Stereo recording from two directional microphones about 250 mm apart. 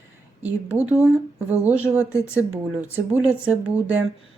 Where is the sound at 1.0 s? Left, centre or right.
Centre.